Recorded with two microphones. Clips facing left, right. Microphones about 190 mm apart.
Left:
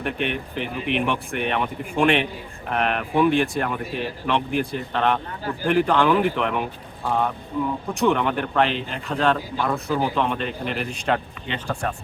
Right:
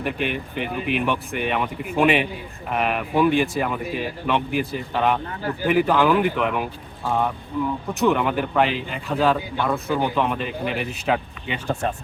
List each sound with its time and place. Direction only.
0.0 s speech: centre (ahead or behind)
7.9 s speech: 5° right (ahead or behind)
11.7 s speech: 20° right (ahead or behind)